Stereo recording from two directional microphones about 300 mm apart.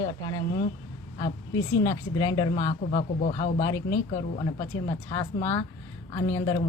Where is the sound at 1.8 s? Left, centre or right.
Centre.